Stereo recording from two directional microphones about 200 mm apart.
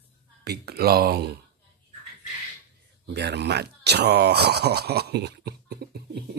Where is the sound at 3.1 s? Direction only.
55° right (ahead or behind).